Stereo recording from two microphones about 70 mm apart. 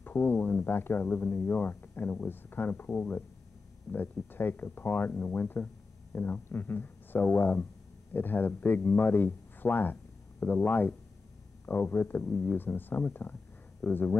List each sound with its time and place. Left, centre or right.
0.0 s speech: left
12.5 s speech: left